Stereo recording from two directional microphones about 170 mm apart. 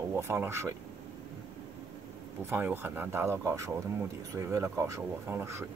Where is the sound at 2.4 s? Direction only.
10° right (ahead or behind).